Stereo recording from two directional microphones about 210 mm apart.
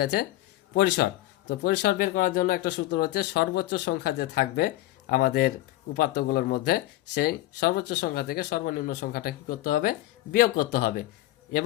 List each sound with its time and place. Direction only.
0.0 s speech: 50° left (ahead or behind)